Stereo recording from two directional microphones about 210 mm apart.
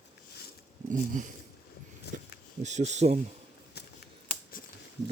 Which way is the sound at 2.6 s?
35° right (ahead or behind).